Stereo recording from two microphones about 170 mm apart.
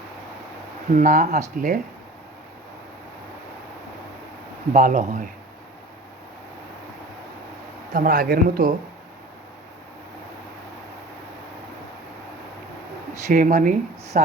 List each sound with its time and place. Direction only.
0.9 s speech: 55° right (ahead or behind)
4.7 s speech: 50° right (ahead or behind)
7.9 s speech: 60° right (ahead or behind)
13.2 s speech: 50° right (ahead or behind)